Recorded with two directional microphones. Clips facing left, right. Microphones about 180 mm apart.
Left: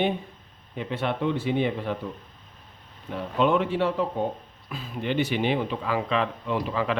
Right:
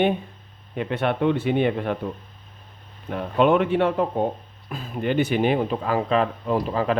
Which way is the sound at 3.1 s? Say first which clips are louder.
Right 4 dB; 55° right (ahead or behind).